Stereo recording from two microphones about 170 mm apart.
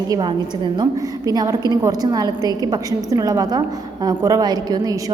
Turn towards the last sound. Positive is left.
turn(degrees=-20)  # may be behind; listen again after turning